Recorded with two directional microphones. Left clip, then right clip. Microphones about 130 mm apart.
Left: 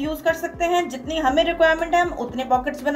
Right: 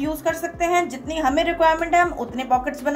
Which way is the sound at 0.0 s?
Centre (ahead or behind).